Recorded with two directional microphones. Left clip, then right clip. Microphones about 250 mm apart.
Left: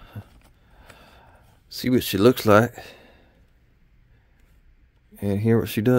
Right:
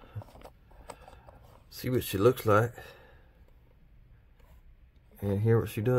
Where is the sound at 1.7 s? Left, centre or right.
Left.